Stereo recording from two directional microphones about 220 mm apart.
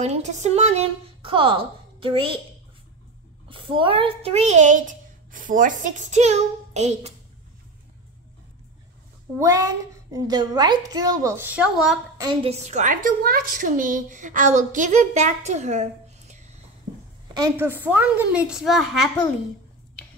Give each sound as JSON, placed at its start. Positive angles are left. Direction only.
{"t": 0.0, "sound": "a woman's voice", "side_deg": -30}
{"t": 3.4, "sound": "a woman's voice", "side_deg": -25}
{"t": 9.4, "sound": "a woman's voice", "side_deg": -15}
{"t": 12.2, "sound": "a woman's voice", "side_deg": -25}
{"t": 17.4, "sound": "a woman's voice", "side_deg": -10}